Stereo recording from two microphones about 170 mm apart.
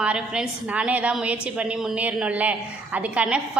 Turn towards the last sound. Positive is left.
turn(degrees=-5)  # may be behind; listen again after turning